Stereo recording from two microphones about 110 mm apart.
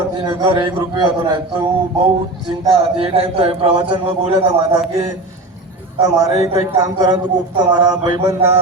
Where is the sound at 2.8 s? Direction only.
60° right (ahead or behind).